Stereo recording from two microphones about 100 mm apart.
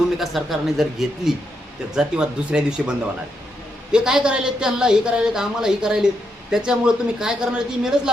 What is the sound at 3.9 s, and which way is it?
A woman's voice, 5° right (ahead or behind).